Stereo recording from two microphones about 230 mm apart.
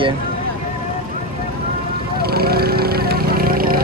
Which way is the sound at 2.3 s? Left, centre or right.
Right.